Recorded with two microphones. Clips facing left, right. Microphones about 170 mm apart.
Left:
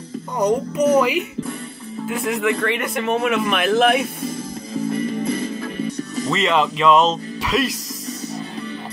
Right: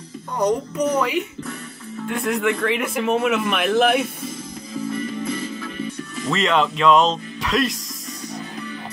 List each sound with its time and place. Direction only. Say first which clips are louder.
0.4 s a woman's voice: left 2 dB; 10° left (ahead or behind)
5.6 s music: left 4 dB; 40° left (ahead or behind)
6.3 s speech: even; centre (ahead or behind)